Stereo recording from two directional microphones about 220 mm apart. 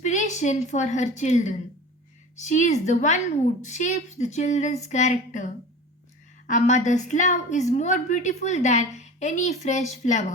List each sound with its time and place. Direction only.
0.0 s a woman's voice: 35° left (ahead or behind)
6.5 s a woman's voice: 35° left (ahead or behind)